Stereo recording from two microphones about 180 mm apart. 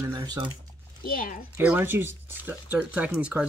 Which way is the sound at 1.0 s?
50° left (ahead or behind).